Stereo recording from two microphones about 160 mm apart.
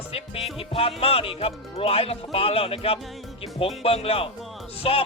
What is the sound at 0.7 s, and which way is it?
Speech, 35° left (ahead or behind).